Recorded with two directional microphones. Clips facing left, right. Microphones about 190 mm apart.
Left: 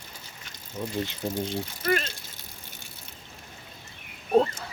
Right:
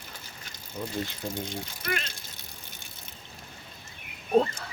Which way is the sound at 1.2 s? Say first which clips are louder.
Left 4 dB; 15° left (ahead or behind).